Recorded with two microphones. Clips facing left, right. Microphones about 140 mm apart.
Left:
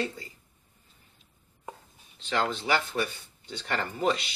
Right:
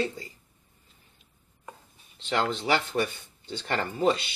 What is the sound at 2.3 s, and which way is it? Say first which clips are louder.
Speech: right 1 dB; 25° right (ahead or behind).